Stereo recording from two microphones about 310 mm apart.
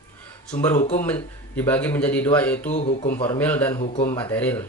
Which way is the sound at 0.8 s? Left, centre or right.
Left.